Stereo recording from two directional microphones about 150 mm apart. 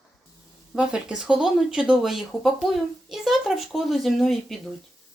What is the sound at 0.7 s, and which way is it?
Speech, 5° right (ahead or behind).